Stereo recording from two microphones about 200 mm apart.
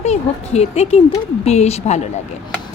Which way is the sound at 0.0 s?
35° left (ahead or behind).